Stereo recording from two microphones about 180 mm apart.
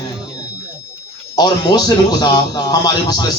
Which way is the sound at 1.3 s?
20° left (ahead or behind).